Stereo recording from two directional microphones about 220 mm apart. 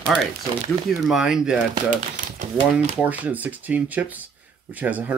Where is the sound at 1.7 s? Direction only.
35° right (ahead or behind).